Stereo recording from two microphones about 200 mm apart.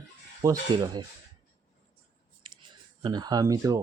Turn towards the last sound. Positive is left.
turn(degrees=-15)  # may be behind; listen again after turning